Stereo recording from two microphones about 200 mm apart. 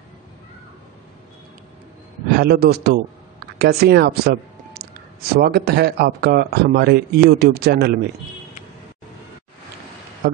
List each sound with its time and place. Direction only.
2.3 s speech: 50° right (ahead or behind)